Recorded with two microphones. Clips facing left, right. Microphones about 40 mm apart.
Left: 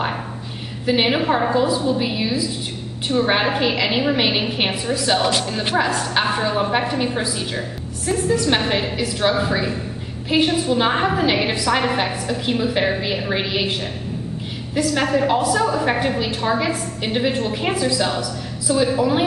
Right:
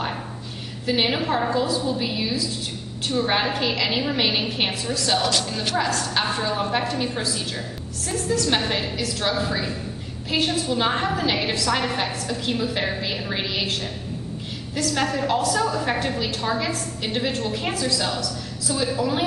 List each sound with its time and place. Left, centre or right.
0.8 s a woman's voice: centre
14.8 s a woman's voice: centre